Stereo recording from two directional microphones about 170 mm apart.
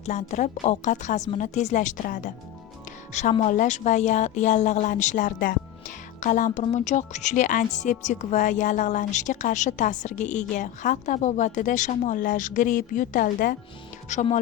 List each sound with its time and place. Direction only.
0.0 s a woman's voice: 40° left (ahead or behind)
14.1 s a woman's voice: 45° left (ahead or behind)